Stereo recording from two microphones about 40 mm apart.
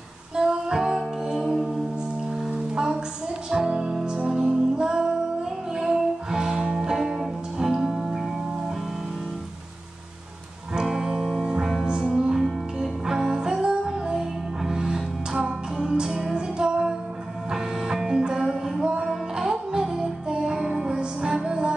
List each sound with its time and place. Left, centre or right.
0.4 s music: centre
2.5 s music: right
10.7 s music: centre
20.5 s music: centre
20.9 s music: right